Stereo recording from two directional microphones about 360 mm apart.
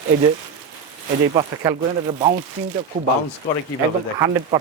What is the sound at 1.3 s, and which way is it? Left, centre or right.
Speech, centre.